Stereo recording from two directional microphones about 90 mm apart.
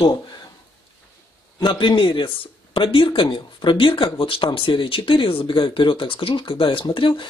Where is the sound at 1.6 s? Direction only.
60° left (ahead or behind).